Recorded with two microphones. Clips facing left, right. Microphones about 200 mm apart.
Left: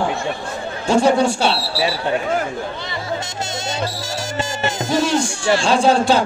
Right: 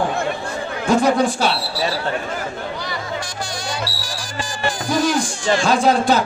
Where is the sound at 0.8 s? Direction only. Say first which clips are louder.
Left 1 dB; 30° left (ahead or behind).